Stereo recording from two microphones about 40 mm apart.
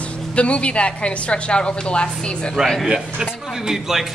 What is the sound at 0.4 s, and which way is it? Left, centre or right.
A woman's voice, left.